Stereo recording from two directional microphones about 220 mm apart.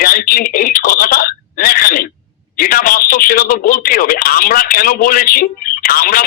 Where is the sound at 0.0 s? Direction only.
40° left (ahead or behind).